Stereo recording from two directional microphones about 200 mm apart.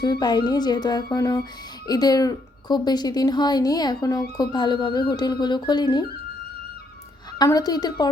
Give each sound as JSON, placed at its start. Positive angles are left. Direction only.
{"t": 0.0, "sound": "a woman's voice", "side_deg": 20}
{"t": 7.3, "sound": "a woman's voice", "side_deg": 20}